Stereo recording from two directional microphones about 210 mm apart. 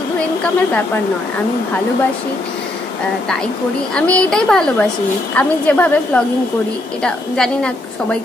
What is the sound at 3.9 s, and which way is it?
A woman's voice, 5° left (ahead or behind).